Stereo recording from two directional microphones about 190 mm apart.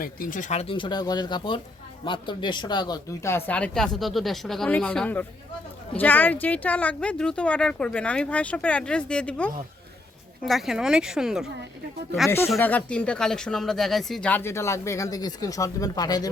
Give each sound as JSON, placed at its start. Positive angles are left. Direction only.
{"t": 0.0, "sound": "speech", "side_deg": 45}
{"t": 12.5, "sound": "speech", "side_deg": 10}